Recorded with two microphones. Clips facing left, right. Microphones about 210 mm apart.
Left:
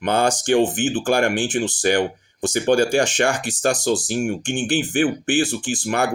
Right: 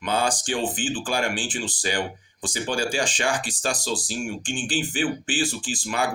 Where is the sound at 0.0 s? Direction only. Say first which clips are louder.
Left 5 dB; 65° left (ahead or behind).